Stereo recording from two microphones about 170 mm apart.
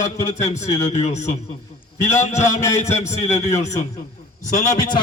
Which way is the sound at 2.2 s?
40° left (ahead or behind).